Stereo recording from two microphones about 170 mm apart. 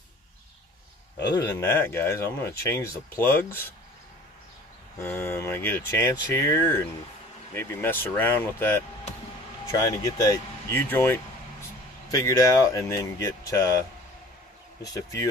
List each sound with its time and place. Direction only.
1.3 s speech: 15° left (ahead or behind)
5.0 s speech: 15° left (ahead or behind)
14.8 s speech: 20° left (ahead or behind)